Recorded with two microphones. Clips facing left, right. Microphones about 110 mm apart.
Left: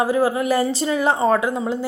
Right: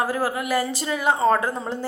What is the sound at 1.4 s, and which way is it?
Speech, 10° left (ahead or behind).